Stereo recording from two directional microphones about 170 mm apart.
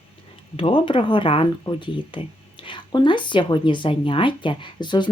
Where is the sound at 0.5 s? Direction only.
30° left (ahead or behind).